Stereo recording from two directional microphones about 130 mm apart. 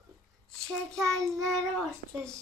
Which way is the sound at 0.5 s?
5° left (ahead or behind).